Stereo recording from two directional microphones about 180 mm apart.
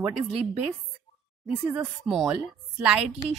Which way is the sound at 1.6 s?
10° right (ahead or behind).